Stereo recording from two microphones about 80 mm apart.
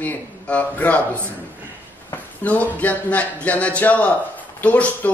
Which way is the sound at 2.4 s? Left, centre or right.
Centre.